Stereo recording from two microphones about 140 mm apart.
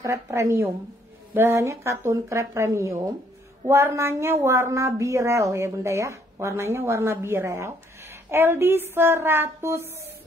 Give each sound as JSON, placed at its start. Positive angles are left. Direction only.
{"t": 0.0, "sound": "speech", "side_deg": -20}